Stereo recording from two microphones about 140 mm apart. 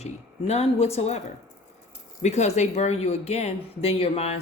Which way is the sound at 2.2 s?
55° left (ahead or behind).